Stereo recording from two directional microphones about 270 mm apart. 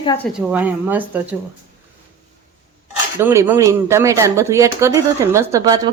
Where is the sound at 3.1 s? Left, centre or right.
Centre.